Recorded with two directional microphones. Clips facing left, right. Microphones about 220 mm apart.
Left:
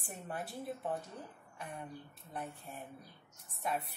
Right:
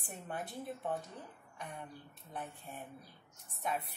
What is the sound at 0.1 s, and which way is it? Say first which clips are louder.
Speech: even; centre (ahead or behind).